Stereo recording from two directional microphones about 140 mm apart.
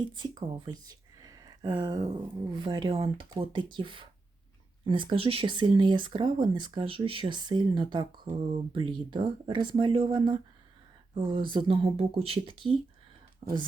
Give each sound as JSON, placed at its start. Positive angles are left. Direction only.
{"t": 0.1, "sound": "speech", "side_deg": -35}